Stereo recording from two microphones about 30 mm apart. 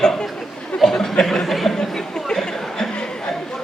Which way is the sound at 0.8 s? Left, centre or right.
Centre.